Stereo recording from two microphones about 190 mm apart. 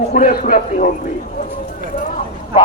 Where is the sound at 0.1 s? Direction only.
45° left (ahead or behind).